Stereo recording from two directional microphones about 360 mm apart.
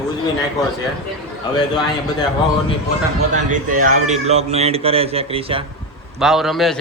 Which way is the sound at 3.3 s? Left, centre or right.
Right.